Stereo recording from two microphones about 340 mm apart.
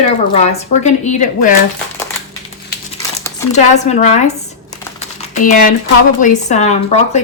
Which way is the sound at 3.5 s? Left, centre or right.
Centre.